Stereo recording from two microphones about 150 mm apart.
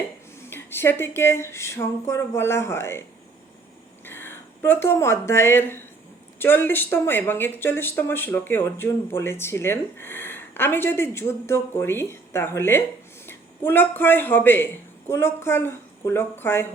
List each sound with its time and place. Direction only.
0.3 s speech: 15° left (ahead or behind)
4.0 s a man's voice: 15° left (ahead or behind)